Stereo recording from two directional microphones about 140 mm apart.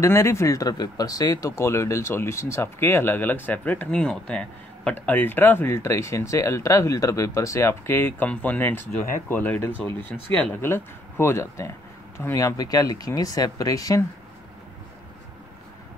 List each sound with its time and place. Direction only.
0.0 s speech: 20° left (ahead or behind)